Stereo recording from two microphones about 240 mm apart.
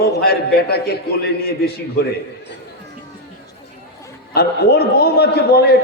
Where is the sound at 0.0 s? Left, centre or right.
Left.